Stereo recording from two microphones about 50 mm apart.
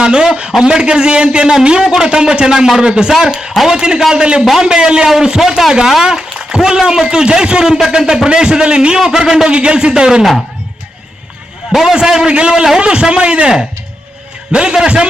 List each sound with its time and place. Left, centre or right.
0.0 s a man's voice: centre
3.8 s a man's voice: centre
11.7 s a man's voice: centre